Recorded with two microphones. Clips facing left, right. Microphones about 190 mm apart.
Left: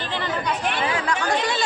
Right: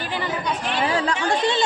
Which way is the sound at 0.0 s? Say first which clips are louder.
Right 1 dB; 10° right (ahead or behind).